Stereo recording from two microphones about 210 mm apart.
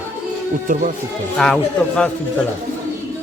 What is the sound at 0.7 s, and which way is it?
Speech, 40° right (ahead or behind).